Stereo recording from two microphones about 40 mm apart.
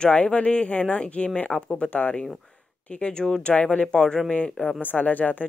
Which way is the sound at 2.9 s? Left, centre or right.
Left.